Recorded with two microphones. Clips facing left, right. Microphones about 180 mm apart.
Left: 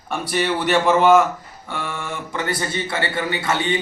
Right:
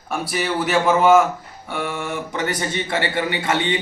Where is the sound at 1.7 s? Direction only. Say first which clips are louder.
Right 3 dB; 15° right (ahead or behind).